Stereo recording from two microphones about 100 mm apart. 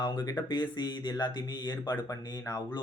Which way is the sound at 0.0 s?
40° left (ahead or behind).